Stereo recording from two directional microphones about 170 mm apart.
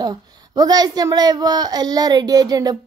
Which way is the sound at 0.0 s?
20° right (ahead or behind).